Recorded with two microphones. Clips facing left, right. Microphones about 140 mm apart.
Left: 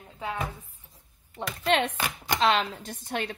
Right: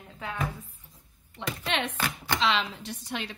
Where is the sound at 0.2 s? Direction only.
15° left (ahead or behind).